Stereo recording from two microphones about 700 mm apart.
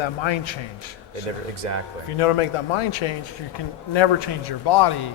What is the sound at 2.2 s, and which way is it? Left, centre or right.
Speech, left.